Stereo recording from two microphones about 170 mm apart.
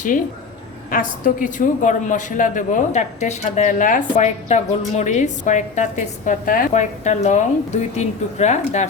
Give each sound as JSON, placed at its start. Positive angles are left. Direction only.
{"t": 0.9, "sound": "a woman's voice", "side_deg": 55}